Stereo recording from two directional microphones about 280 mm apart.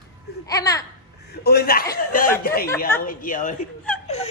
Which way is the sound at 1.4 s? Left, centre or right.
Left.